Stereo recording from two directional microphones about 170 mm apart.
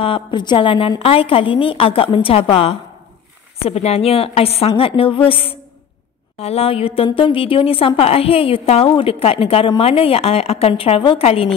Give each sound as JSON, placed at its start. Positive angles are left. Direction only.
{"t": 0.0, "sound": "speech", "side_deg": 30}